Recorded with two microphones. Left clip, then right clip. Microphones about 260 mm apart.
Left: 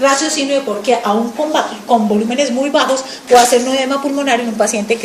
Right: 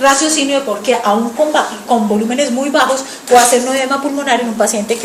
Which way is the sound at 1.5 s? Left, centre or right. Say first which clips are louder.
Even; left.